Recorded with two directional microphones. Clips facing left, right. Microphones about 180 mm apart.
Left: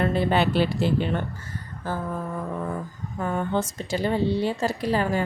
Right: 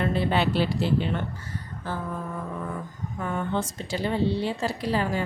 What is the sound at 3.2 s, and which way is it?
A woman's voice, 40° left (ahead or behind).